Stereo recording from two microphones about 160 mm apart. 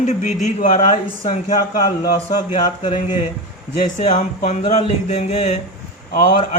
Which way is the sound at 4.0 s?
50° left (ahead or behind).